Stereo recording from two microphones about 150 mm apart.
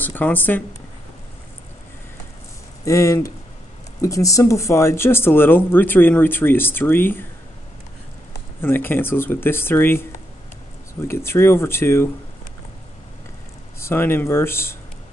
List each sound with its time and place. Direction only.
0.0 s speech: 10° left (ahead or behind)
2.8 s speech: 20° left (ahead or behind)
8.5 s speech: 15° left (ahead or behind)
11.1 s speech: 15° left (ahead or behind)
13.7 s speech: 15° left (ahead or behind)